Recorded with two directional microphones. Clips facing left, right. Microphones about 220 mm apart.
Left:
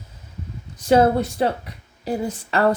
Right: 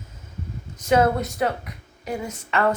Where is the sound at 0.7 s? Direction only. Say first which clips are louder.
Left 3 dB; 30° left (ahead or behind).